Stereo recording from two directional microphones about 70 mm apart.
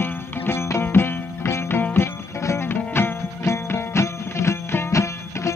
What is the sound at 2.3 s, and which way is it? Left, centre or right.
Music, left.